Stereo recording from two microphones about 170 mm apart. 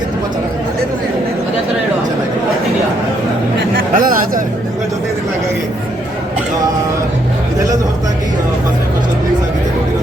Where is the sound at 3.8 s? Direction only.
55° right (ahead or behind).